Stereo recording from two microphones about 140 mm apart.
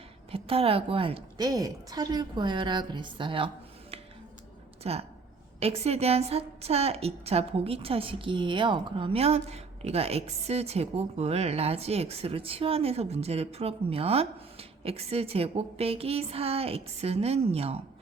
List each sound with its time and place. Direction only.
0.3 s a woman's voice: 40° right (ahead or behind)
1.4 s a woman's voice: 25° right (ahead or behind)
4.8 s a woman's voice: 45° right (ahead or behind)